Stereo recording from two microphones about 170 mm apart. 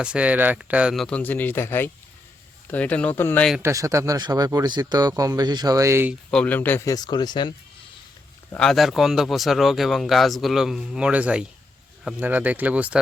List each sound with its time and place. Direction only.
0.0 s speech: 5° right (ahead or behind); by 3.5 s 10° left (ahead or behind)
3.6 s speech: 20° right (ahead or behind)
6.3 s speech: 10° left (ahead or behind); by 7.5 s 25° left (ahead or behind)
8.5 s speech: 5° left (ahead or behind)